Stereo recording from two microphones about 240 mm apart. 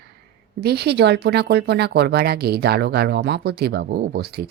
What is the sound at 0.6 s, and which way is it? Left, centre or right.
Speech, right.